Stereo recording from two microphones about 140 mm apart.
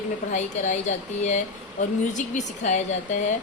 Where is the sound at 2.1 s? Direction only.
60° left (ahead or behind).